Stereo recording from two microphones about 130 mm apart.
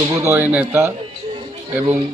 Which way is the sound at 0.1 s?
25° right (ahead or behind).